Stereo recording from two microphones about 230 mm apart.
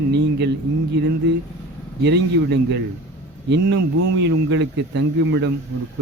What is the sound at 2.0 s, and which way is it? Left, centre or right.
Speech, right.